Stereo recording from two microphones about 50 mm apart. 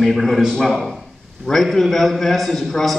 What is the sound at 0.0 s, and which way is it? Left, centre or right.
A man's voice, centre.